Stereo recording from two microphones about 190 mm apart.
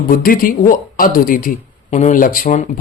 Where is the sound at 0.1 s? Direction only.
50° left (ahead or behind).